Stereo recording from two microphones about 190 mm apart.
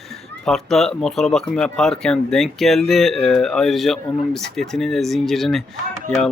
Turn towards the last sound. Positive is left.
turn(degrees=5)  # may be behind; listen again after turning